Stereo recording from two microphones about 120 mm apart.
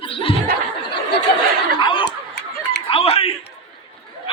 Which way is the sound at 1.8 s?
45° left (ahead or behind).